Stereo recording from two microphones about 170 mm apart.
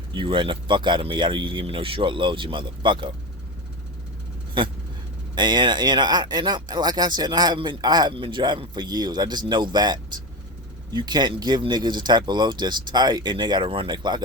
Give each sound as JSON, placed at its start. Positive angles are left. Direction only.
{"t": 0.1, "sound": "speech", "side_deg": -30}
{"t": 5.3, "sound": "speech", "side_deg": -25}